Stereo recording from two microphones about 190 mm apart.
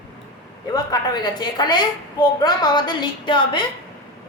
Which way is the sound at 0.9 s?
20° left (ahead or behind).